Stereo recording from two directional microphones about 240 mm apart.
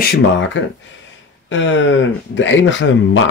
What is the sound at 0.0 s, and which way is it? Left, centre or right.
Speech, left.